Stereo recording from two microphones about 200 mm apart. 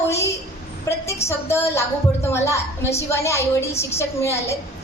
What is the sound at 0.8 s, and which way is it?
A woman's voice, 15° left (ahead or behind).